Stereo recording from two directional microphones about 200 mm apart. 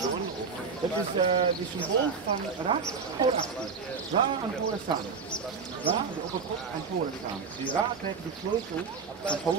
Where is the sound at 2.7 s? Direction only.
25° right (ahead or behind).